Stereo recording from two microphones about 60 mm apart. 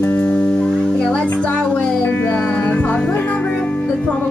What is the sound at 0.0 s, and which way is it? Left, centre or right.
Music, left.